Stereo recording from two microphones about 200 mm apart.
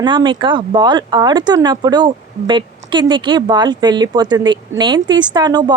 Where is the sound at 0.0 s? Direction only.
25° right (ahead or behind).